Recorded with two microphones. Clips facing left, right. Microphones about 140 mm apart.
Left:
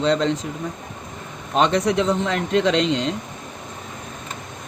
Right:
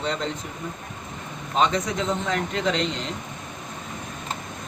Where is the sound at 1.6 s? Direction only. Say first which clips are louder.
Left 5 dB; 70° left (ahead or behind).